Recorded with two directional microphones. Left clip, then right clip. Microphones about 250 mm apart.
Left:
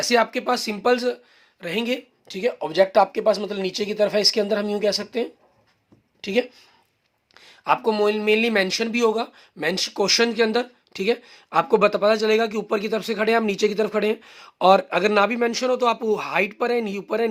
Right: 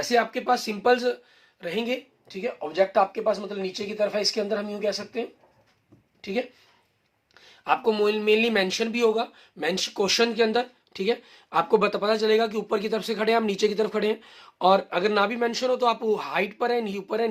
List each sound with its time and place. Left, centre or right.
0.1 s speech: left
7.3 s speech: left